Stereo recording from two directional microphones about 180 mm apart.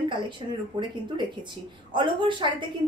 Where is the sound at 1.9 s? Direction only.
25° right (ahead or behind).